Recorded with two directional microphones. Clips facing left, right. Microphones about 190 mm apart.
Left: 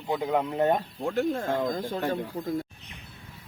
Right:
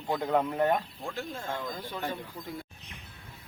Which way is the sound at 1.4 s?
60° left (ahead or behind).